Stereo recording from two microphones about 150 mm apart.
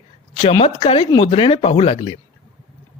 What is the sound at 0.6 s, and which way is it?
Speech, 40° left (ahead or behind).